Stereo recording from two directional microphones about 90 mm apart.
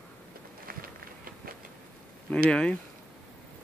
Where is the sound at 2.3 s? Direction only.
10° left (ahead or behind).